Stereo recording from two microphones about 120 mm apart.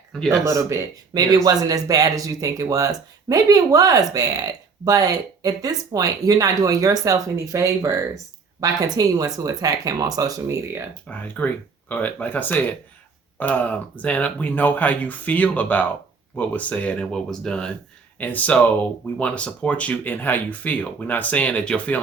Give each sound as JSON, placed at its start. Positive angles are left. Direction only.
{"t": 0.3, "sound": "speech", "side_deg": -25}
{"t": 11.1, "sound": "speech", "side_deg": 15}